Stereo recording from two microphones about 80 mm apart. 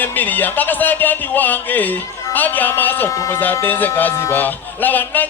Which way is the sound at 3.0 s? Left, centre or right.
Left.